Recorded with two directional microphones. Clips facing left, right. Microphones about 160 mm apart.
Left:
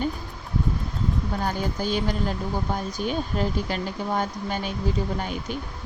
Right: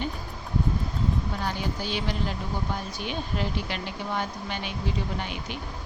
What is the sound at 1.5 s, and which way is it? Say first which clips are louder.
Speech: left 4 dB; 45° left (ahead or behind).